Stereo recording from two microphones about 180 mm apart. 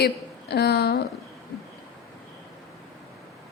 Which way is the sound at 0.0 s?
65° left (ahead or behind).